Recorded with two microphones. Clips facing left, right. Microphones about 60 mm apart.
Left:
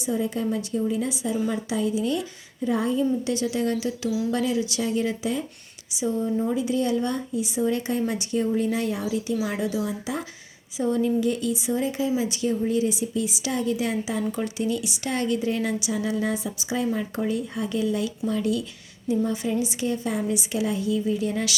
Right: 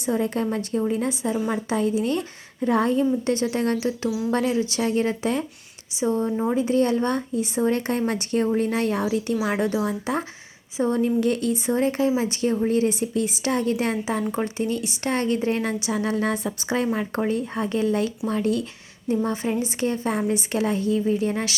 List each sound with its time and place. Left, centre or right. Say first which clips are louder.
0.0 s speech: right 2 dB; right
3.2 s speech: right 2 dB; right